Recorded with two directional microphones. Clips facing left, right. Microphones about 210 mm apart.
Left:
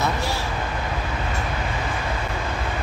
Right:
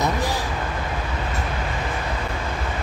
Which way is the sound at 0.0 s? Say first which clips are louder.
Right 2 dB; 15° right (ahead or behind).